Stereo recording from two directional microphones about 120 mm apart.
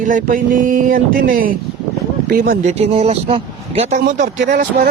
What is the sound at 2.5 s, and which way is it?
Speech, 70° right (ahead or behind).